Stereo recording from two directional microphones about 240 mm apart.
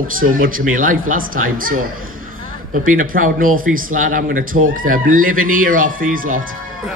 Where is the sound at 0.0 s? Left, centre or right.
Right.